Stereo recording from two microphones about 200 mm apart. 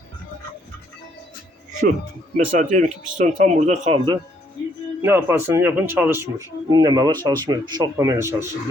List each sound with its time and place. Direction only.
2.3 s speech: 40° right (ahead or behind)
5.0 s speech: 10° right (ahead or behind)